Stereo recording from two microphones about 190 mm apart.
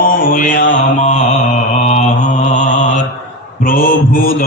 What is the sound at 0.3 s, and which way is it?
Mantra, 45° left (ahead or behind).